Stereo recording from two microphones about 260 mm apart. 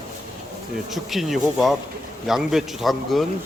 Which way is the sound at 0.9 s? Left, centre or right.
Centre.